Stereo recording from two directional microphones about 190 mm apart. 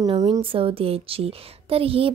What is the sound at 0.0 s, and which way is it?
A woman's voice, 20° right (ahead or behind).